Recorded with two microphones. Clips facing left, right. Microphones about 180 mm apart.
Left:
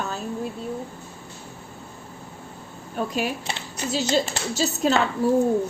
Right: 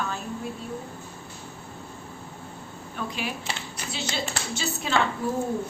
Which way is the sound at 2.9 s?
45° left (ahead or behind).